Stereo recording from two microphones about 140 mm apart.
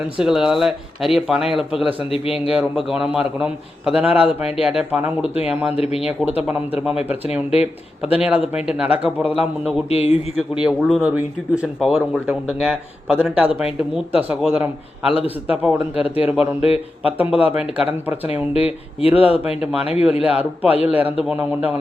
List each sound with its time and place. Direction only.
0.2 s speech: 5° right (ahead or behind)
2.0 s speech: 45° left (ahead or behind)
2.5 s speech: 5° right (ahead or behind)
5.7 s speech: 45° left (ahead or behind)
6.5 s speech: 10° right (ahead or behind)
8.0 s speech: 10° right (ahead or behind)
9.9 s speech: 45° left (ahead or behind)
10.5 s speech: 5° right (ahead or behind)
16.6 s speech: 45° left (ahead or behind)
17.0 s speech: 10° right (ahead or behind)
18.5 s speech: 45° left (ahead or behind)
19.5 s speech: 5° right (ahead or behind)
19.9 s speech: 45° left (ahead or behind)
20.2 s speech: 10° right (ahead or behind)